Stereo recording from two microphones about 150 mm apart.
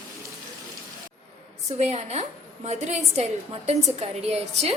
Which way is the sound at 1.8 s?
50° right (ahead or behind).